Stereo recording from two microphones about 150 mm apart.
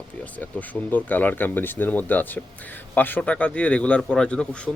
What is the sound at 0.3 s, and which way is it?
A man's voice, 10° left (ahead or behind).